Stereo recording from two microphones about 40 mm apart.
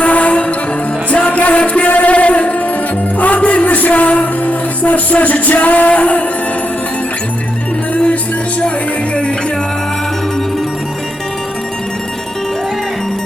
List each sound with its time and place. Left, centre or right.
0.0 s music: left